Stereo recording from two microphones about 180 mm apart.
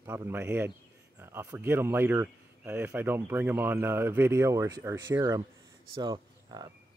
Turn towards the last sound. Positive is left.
turn(degrees=-25)  # may be behind; listen again after turning